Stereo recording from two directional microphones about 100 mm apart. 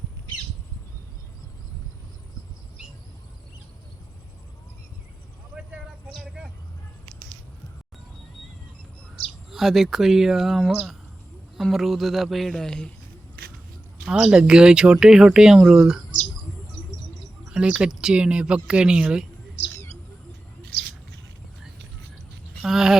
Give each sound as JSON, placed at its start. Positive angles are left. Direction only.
{"t": 9.5, "sound": "speech", "side_deg": 0}
{"t": 14.0, "sound": "speech", "side_deg": -10}
{"t": 17.5, "sound": "speech", "side_deg": -10}
{"t": 19.7, "sound": "bird", "side_deg": 25}
{"t": 22.6, "sound": "a sound", "side_deg": -5}